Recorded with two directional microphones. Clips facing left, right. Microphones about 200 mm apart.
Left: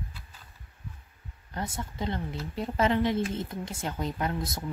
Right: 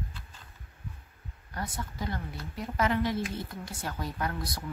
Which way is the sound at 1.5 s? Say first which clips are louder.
Left 2 dB; 25° left (ahead or behind).